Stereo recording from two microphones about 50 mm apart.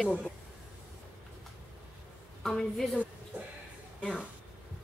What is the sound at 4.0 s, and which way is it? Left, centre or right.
Speech, left.